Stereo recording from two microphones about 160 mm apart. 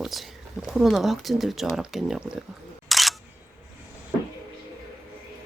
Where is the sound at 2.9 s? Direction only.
Centre (ahead or behind).